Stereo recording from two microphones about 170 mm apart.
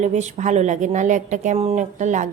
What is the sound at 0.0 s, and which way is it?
A woman's voice, 45° right (ahead or behind).